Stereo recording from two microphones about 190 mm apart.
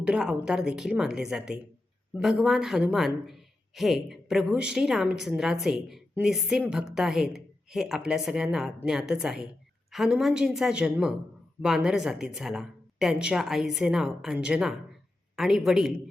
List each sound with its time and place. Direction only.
0.0 s speech: 5° right (ahead or behind)